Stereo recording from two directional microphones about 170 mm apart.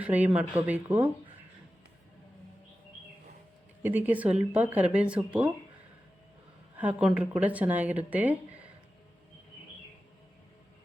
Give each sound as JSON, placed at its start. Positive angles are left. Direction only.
{"t": 0.0, "sound": "speech", "side_deg": -10}
{"t": 3.8, "sound": "speech", "side_deg": -10}
{"t": 6.7, "sound": "speech", "side_deg": -10}